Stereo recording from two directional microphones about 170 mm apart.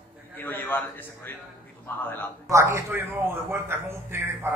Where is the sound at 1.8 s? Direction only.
10° left (ahead or behind).